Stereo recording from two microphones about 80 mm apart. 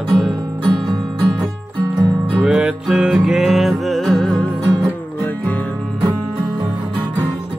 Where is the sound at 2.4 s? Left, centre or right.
Centre.